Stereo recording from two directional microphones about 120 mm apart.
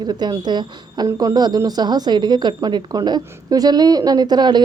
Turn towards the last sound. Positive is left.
turn(degrees=-35)  # may be behind; listen again after turning